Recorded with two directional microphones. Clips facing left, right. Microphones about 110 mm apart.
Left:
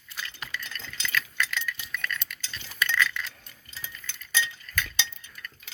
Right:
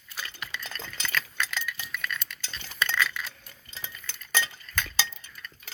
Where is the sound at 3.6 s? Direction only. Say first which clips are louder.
Right 1 dB; 25° right (ahead or behind).